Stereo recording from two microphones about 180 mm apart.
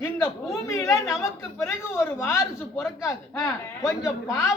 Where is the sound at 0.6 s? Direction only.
15° left (ahead or behind).